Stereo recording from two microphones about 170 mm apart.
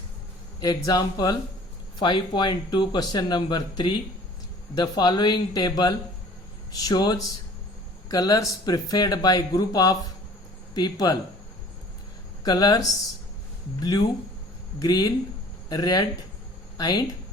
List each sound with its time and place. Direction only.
0.6 s speech: 20° left (ahead or behind)
12.4 s speech: 25° left (ahead or behind)